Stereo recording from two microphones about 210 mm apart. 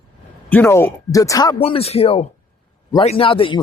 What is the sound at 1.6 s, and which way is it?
Speech, 30° left (ahead or behind).